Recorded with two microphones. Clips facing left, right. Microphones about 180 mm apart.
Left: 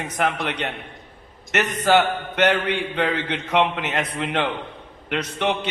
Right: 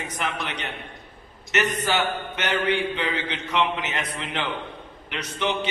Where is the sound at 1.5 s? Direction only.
65° left (ahead or behind).